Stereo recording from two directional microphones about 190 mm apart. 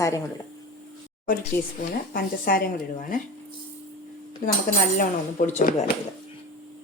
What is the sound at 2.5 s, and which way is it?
Speech, 50° left (ahead or behind).